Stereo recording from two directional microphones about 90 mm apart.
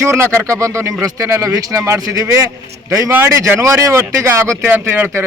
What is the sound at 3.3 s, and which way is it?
A man's voice, 35° right (ahead or behind).